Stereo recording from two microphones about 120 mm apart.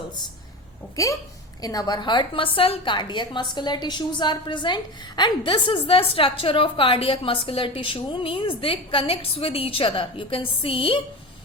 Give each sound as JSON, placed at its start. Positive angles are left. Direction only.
{"t": 1.0, "sound": "a woman's voice", "side_deg": 30}